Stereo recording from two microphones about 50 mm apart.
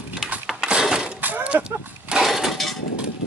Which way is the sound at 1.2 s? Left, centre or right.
Right.